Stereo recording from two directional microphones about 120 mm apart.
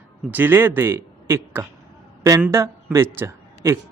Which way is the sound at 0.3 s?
15° right (ahead or behind).